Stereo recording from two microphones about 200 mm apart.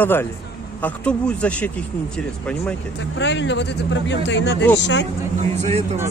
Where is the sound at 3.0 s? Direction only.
65° left (ahead or behind).